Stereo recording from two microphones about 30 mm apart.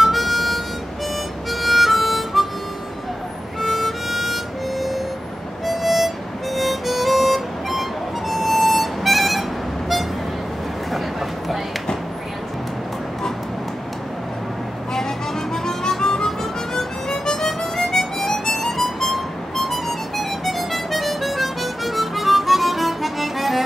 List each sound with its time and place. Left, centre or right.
0.0 s harmonica: centre
3.6 s harmonica: centre
8.3 s music: centre
15.5 s harmonica: centre